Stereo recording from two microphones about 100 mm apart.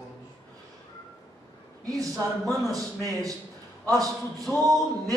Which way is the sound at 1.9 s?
35° right (ahead or behind).